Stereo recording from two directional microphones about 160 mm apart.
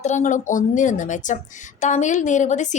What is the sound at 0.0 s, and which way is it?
Speech, 50° left (ahead or behind).